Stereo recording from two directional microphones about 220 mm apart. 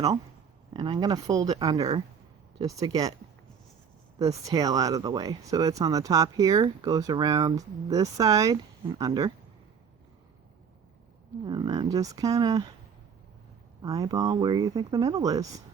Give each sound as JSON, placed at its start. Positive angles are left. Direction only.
{"t": 0.7, "sound": "speech", "side_deg": -20}
{"t": 4.2, "sound": "speech", "side_deg": -15}
{"t": 11.4, "sound": "speech", "side_deg": -20}
{"t": 13.8, "sound": "speech", "side_deg": -15}